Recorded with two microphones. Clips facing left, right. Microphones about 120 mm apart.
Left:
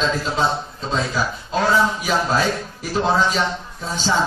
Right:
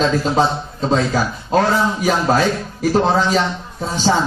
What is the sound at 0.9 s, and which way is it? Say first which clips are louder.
A man's voice: right 4 dB; 50° right (ahead or behind).